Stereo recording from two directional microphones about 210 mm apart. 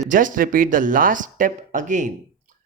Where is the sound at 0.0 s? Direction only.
40° right (ahead or behind).